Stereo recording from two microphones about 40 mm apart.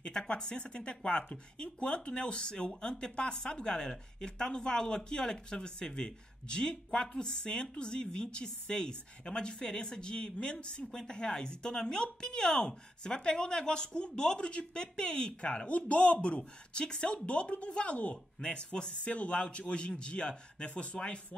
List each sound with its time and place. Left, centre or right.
0.1 s speech: centre; by 16.4 s left
16.7 s speech: centre
17.3 s speech: left
18.1 s speech: left
19.0 s speech: left